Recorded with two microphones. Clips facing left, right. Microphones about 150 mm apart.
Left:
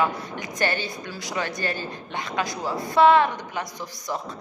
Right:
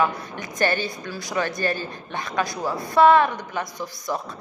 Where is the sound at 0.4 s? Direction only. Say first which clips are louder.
Right 4 dB; 20° left (ahead or behind).